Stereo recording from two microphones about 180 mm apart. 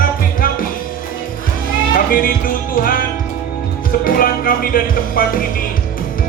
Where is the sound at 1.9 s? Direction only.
50° left (ahead or behind).